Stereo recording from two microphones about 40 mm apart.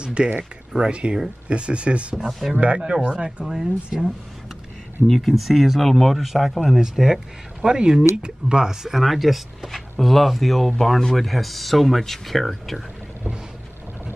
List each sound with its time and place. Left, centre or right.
0.0 s speech: right
3.4 s speech: centre
5.0 s speech: centre
7.6 s speech: centre
9.0 s speech: centre